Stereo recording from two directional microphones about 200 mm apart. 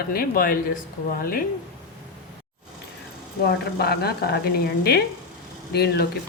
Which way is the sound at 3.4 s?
50° left (ahead or behind).